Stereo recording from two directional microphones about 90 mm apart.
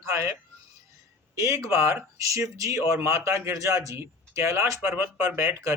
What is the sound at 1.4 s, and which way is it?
Speech, 30° right (ahead or behind).